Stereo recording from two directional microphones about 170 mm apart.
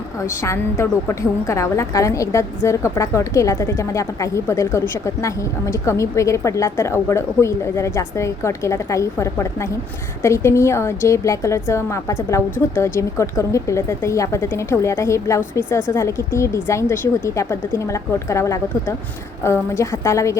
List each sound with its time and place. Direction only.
0.4 s a woman's voice: 15° left (ahead or behind)